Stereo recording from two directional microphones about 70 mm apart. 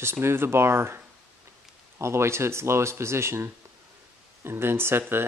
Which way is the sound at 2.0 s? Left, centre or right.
Right.